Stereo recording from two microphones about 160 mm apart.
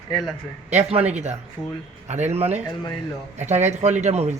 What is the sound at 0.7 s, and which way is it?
Speech, 40° right (ahead or behind).